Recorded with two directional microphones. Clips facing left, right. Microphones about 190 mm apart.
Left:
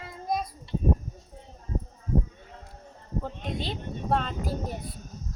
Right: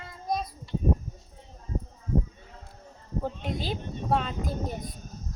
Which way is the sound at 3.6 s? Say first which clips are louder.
Even; 5° right (ahead or behind).